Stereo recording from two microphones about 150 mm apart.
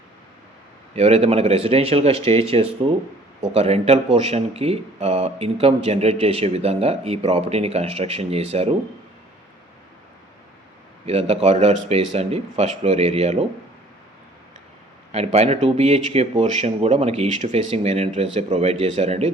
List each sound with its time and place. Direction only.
0.9 s speech: 45° right (ahead or behind)
11.0 s speech: 45° right (ahead or behind)
15.1 s speech: 45° right (ahead or behind)